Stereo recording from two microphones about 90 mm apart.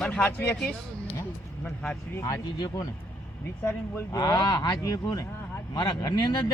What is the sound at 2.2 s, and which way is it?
Speech, 40° left (ahead or behind).